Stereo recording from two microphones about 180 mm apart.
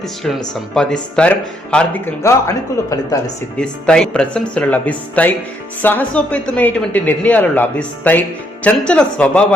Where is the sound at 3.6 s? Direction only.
5° left (ahead or behind).